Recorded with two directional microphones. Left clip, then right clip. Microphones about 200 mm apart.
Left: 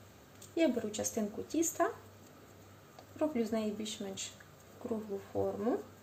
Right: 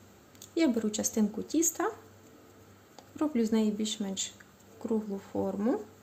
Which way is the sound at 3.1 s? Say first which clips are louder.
Right 4 dB; 55° right (ahead or behind).